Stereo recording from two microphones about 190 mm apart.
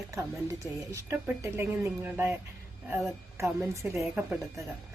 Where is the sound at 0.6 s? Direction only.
10° right (ahead or behind).